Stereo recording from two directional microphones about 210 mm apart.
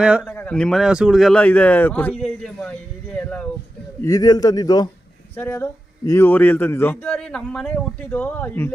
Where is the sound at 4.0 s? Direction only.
15° left (ahead or behind).